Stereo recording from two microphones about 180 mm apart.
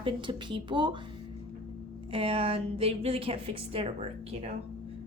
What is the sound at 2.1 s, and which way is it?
A woman's voice, 30° right (ahead or behind).